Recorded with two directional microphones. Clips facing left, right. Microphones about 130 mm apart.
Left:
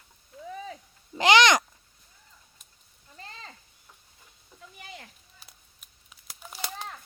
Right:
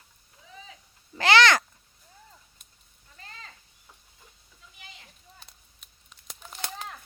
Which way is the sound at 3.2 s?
30° left (ahead or behind).